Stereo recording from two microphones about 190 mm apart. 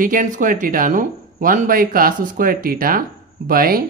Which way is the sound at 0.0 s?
45° right (ahead or behind).